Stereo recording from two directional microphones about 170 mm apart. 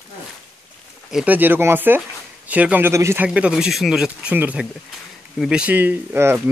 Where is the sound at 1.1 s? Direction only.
10° right (ahead or behind).